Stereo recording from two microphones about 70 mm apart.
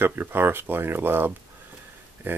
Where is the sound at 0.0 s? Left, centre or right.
Right.